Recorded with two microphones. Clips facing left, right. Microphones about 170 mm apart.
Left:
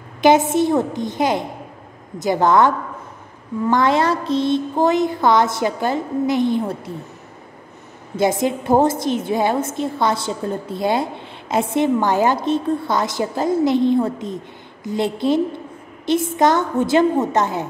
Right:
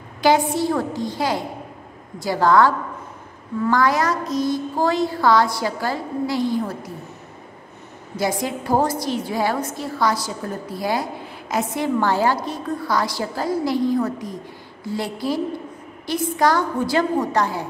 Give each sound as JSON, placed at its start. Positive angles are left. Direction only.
{"t": 0.2, "sound": "a woman's voice", "side_deg": 20}
{"t": 8.2, "sound": "a woman's voice", "side_deg": 25}